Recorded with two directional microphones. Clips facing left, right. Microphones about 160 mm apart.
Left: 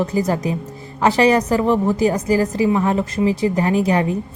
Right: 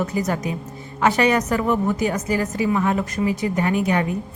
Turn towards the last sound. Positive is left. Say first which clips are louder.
# left 3 dB
turn(degrees=30)  # may be behind; listen again after turning